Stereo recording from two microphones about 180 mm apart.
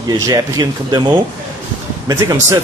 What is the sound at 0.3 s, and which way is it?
Speech, 20° right (ahead or behind).